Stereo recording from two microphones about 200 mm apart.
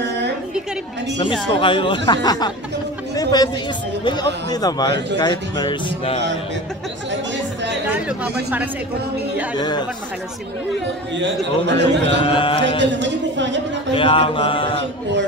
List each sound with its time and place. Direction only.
1.5 s speech: 25° left (ahead or behind)
8.2 s a woman's voice: 5° right (ahead or behind)
9.6 s speech: 20° left (ahead or behind)
11.6 s speech: 60° right (ahead or behind)
12.3 s speech: 25° left (ahead or behind)
12.7 s speech: 65° right (ahead or behind)
13.9 s speech: 25° left (ahead or behind)